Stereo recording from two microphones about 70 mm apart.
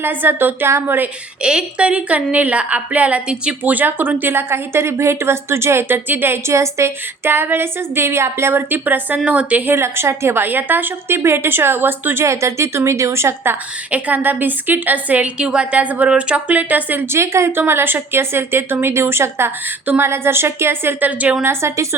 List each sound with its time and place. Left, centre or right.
0.0 s a woman's voice: right
1.4 s a woman's voice: centre; by 6.9 s right
7.3 s a woman's voice: right
9.7 s a woman's voice: right
12.2 s a woman's voice: right
13.9 s a woman's voice: right
21.1 s a woman's voice: right
21.4 s a woman's voice: right